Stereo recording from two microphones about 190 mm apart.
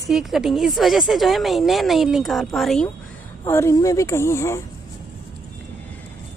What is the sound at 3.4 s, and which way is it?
A woman's voice, 15° left (ahead or behind).